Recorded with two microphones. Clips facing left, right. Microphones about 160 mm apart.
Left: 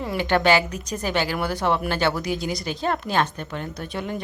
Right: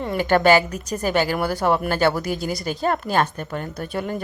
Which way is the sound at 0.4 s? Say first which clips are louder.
Right 3 dB; 45° right (ahead or behind).